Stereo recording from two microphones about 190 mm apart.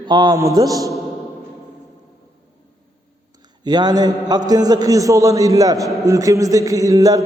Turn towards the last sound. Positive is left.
turn(degrees=-15)  # may be behind; listen again after turning